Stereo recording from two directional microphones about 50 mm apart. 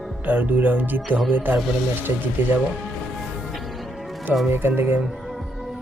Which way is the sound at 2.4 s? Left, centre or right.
Right.